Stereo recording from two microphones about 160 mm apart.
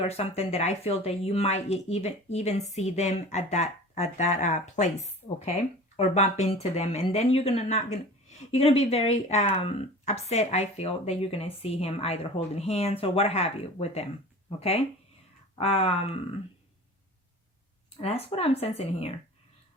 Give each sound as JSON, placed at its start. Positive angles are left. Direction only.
{"t": 0.0, "sound": "speech", "side_deg": 40}
{"t": 18.0, "sound": "speech", "side_deg": 40}